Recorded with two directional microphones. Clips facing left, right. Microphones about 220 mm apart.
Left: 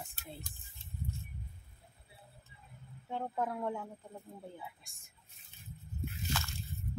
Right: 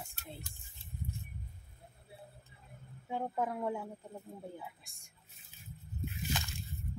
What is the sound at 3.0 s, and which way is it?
Speech, 10° right (ahead or behind).